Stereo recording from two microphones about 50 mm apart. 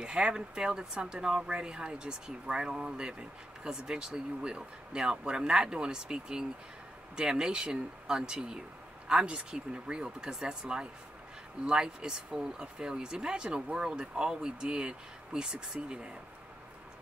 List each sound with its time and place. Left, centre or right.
0.0 s speech: centre